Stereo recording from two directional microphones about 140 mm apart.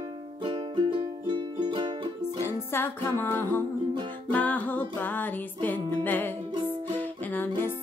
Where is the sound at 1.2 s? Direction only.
30° right (ahead or behind).